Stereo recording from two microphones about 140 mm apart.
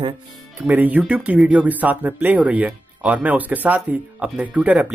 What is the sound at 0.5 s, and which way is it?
Speech, 15° right (ahead or behind).